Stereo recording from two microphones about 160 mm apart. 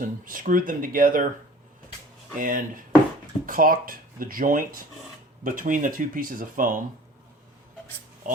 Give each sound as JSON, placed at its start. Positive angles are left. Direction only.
{"t": 0.0, "sound": "speech", "side_deg": -55}
{"t": 2.4, "sound": "speech", "side_deg": -60}